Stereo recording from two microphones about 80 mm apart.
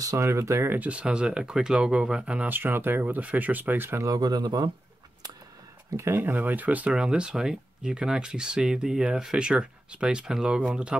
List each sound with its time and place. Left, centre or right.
0.0 s speech: right
0.7 s speech: centre
4.0 s speech: right
5.9 s speech: right; by 11.0 s centre